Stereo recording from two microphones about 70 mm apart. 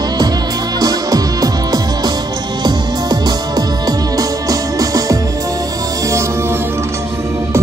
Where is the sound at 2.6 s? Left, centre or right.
Right.